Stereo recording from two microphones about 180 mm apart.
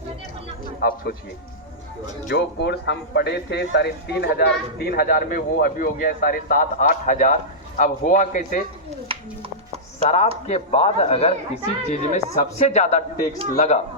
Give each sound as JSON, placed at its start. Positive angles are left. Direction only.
{"t": 0.8, "sound": "a man's voice", "side_deg": 60}
{"t": 2.3, "sound": "a man's voice", "side_deg": 70}
{"t": 9.0, "sound": "speech", "side_deg": -30}
{"t": 10.4, "sound": "speech", "side_deg": 35}